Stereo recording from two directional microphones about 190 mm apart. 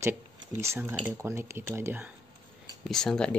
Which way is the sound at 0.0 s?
15° right (ahead or behind).